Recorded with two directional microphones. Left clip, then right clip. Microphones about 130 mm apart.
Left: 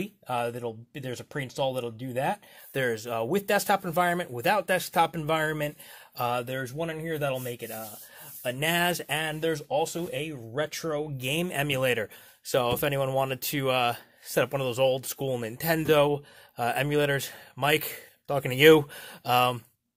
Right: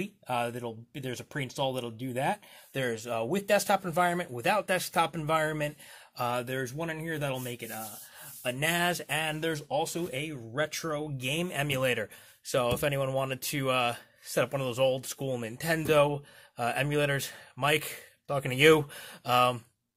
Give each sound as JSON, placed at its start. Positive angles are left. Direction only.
{"t": 0.0, "sound": "speech", "side_deg": 35}
{"t": 8.5, "sound": "speech", "side_deg": 45}